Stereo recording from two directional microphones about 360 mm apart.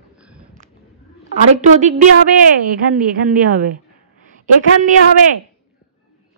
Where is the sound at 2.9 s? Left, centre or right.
Right.